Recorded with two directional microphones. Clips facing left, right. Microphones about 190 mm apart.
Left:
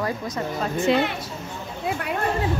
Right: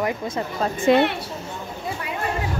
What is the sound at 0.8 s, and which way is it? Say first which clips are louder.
Speech: right 4 dB; 65° right (ahead or behind).